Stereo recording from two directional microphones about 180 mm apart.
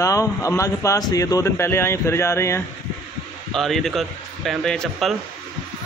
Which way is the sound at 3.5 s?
Centre (ahead or behind).